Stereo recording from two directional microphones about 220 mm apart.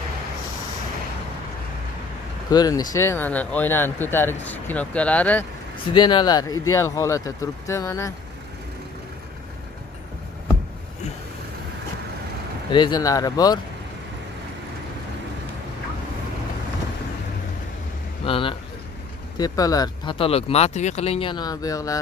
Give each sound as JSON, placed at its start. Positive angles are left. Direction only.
{"t": 2.5, "sound": "speech", "side_deg": 15}
{"t": 5.9, "sound": "speech", "side_deg": 20}
{"t": 12.7, "sound": "speech", "side_deg": 20}
{"t": 18.2, "sound": "speech", "side_deg": 25}